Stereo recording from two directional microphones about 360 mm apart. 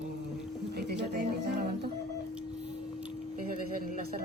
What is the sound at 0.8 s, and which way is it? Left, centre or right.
Speech, right.